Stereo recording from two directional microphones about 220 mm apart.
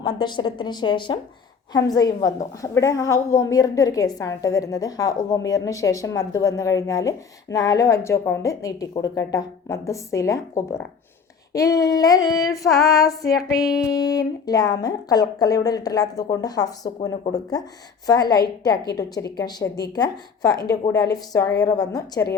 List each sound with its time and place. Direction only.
0.0 s a woman's voice: 20° left (ahead or behind)